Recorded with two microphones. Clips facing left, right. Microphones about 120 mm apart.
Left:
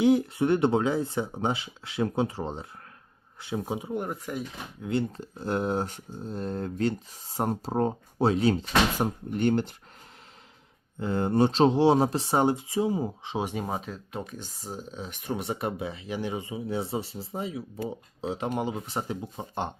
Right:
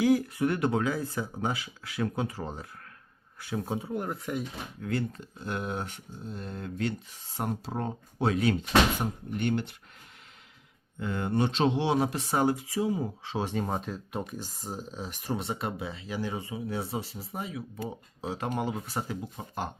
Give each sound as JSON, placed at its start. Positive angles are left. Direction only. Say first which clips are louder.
{"t": 0.0, "sound": "speech", "louder": "left 2 dB", "side_deg": 25}
{"t": 3.9, "sound": "speech", "louder": "even", "side_deg": 0}
{"t": 4.8, "sound": "speech", "louder": "left 3 dB", "side_deg": 25}
{"t": 5.2, "sound": "speech", "louder": "left 6 dB", "side_deg": 35}
{"t": 11.0, "sound": "speech", "louder": "left 5 dB", "side_deg": 35}
{"t": 15.4, "sound": "speech", "louder": "left 3 dB", "side_deg": 20}